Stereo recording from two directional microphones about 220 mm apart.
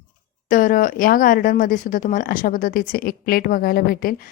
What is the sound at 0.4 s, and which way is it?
A woman's voice, 40° left (ahead or behind).